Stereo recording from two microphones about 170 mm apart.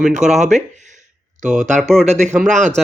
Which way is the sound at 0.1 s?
45° right (ahead or behind).